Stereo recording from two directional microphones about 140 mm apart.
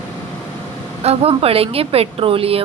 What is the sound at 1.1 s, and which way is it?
A woman's voice, 45° right (ahead or behind).